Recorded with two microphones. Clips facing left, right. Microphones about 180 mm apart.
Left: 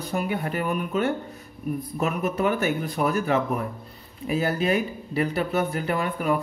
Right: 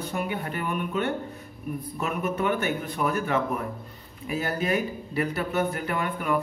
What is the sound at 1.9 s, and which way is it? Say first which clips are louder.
Speech: left 2 dB; 35° left (ahead or behind).